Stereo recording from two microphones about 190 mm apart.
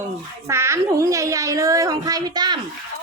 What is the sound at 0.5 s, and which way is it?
A child's voice, 15° right (ahead or behind).